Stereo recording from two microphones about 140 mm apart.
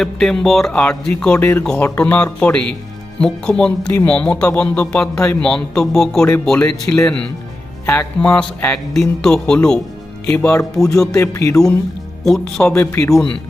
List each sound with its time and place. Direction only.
0.0 s speech: 5° left (ahead or behind)
11.1 s speech: 20° left (ahead or behind)
12.2 s speech: centre (ahead or behind)
12.6 s speech: 15° left (ahead or behind)